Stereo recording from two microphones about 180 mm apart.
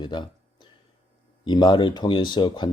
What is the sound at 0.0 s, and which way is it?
Speech, 25° left (ahead or behind).